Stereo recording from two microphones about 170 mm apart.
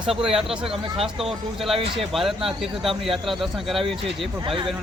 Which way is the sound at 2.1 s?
Centre (ahead or behind).